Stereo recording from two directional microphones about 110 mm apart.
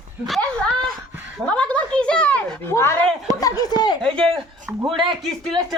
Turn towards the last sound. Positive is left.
turn(degrees=0)  # may be behind; listen again after turning